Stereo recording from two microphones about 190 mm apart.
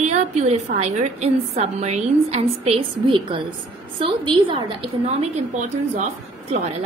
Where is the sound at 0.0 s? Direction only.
35° right (ahead or behind).